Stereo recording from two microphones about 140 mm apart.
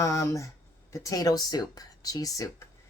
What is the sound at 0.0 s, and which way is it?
Speech, 20° left (ahead or behind).